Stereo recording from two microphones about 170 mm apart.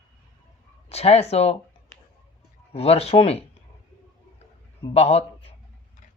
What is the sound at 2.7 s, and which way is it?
Speech, 35° left (ahead or behind).